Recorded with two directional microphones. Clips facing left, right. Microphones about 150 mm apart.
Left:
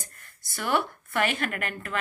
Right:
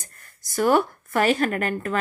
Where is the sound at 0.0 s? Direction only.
40° right (ahead or behind).